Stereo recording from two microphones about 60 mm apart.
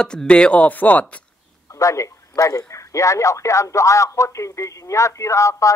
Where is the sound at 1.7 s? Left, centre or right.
Left.